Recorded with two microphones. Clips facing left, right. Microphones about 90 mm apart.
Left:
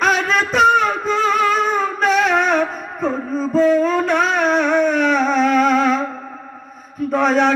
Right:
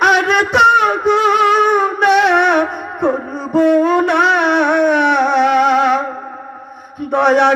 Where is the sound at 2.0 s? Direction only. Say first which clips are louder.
Right 4 dB; 65° right (ahead or behind).